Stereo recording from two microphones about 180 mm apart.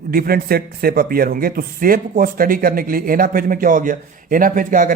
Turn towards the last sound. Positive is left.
turn(degrees=-50)  # may be behind; listen again after turning